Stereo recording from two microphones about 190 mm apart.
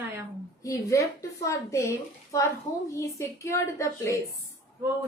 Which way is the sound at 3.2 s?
15° left (ahead or behind).